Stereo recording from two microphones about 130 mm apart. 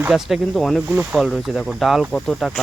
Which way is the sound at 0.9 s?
10° right (ahead or behind).